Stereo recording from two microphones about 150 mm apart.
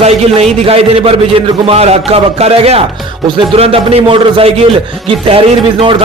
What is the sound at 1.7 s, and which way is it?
Music, 45° right (ahead or behind).